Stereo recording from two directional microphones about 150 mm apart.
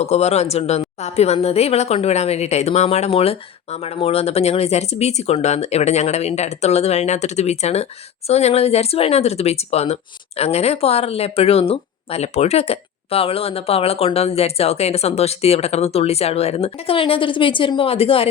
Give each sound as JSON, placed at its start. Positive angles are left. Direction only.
{"t": 0.0, "sound": "speech", "side_deg": 45}